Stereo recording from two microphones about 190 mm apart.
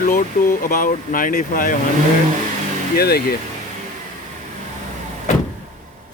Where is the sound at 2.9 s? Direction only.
55° left (ahead or behind).